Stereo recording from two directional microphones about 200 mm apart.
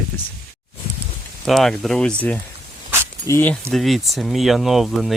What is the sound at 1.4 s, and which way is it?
Speech, centre (ahead or behind).